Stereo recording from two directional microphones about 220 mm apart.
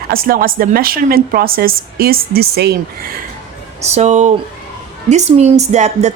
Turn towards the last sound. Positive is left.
turn(degrees=-30)  # may be behind; listen again after turning